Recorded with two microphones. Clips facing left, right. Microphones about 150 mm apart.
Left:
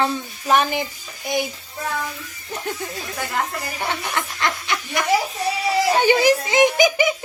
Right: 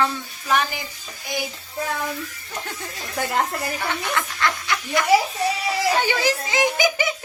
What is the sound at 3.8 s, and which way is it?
Speech, 20° left (ahead or behind).